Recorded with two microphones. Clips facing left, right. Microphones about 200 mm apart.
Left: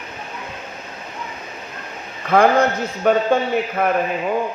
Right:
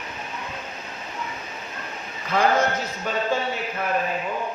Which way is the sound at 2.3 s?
60° left (ahead or behind).